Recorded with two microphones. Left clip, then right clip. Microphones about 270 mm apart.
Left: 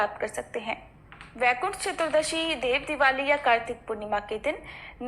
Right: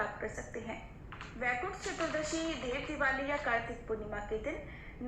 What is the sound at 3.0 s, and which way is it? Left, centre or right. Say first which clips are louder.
Speech: left 9 dB; left.